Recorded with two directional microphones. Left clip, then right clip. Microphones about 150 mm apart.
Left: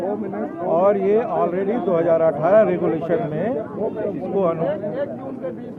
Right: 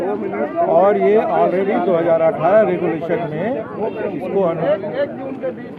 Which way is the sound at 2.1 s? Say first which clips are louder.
Right 1 dB; 5° left (ahead or behind).